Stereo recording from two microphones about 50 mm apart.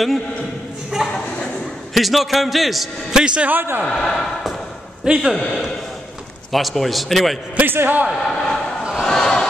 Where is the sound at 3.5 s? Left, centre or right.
Right.